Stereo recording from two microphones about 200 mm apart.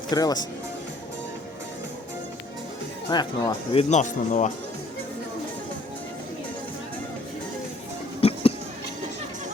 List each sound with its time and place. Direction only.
0.1 s speech: 20° left (ahead or behind)
3.1 s speech: 20° left (ahead or behind); by 4.5 s 40° left (ahead or behind)
8.2 s a sound: 30° left (ahead or behind)